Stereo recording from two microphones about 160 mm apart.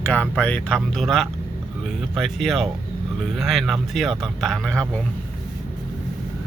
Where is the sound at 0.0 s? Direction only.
10° left (ahead or behind).